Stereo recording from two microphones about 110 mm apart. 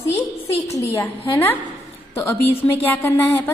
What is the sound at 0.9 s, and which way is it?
A woman's voice, 20° left (ahead or behind).